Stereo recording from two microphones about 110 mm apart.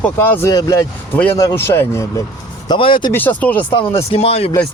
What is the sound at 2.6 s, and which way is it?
Speech, 50° left (ahead or behind).